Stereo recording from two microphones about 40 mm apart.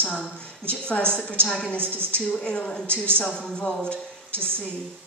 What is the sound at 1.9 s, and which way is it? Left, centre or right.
Speech, right.